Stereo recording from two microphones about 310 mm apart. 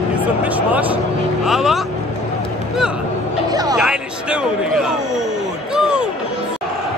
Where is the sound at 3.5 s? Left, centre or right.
Centre.